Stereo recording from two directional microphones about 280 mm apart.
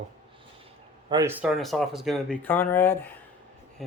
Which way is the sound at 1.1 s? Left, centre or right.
Centre.